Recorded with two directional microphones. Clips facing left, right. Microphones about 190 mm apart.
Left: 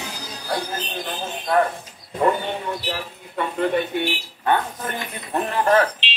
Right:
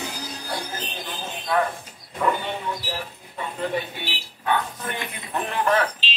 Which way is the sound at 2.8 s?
70° left (ahead or behind).